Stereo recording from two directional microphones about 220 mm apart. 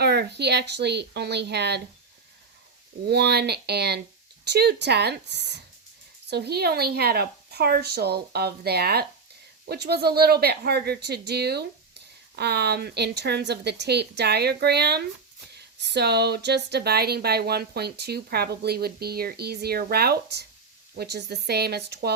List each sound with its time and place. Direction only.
0.0 s a woman's voice: 45° right (ahead or behind)
3.1 s speech: 50° right (ahead or behind)